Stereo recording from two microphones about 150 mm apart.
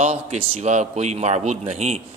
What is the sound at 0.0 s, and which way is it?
A man's voice, 45° right (ahead or behind).